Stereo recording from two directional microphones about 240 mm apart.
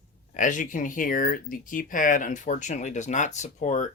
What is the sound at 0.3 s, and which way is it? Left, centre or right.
Speech, left.